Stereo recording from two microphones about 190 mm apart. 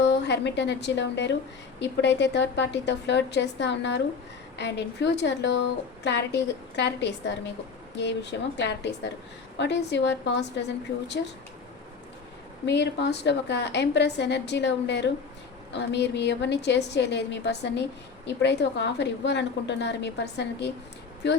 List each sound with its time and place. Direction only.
0.0 s a woman's voice: 65° left (ahead or behind)
12.6 s a woman's voice: 65° left (ahead or behind)